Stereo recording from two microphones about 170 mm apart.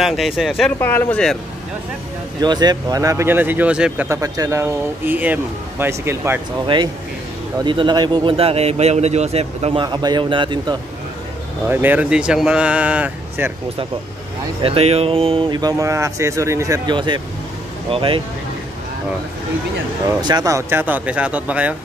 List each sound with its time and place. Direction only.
0.0 s speech: centre (ahead or behind)
0.7 s speech: 10° left (ahead or behind)
2.4 s a man's voice: 25° right (ahead or behind); by 4.1 s 5° right (ahead or behind)
4.1 s a man's voice: 20° right (ahead or behind)
7.6 s speech: 25° right (ahead or behind)
11.7 s a man's voice: 10° right (ahead or behind)
14.6 s speech: 35° right (ahead or behind)
20.2 s a man's voice: 25° right (ahead or behind); by 21.7 s 10° right (ahead or behind)